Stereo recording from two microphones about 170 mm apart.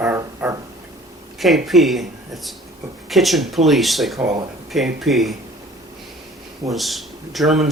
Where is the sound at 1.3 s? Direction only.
Centre (ahead or behind).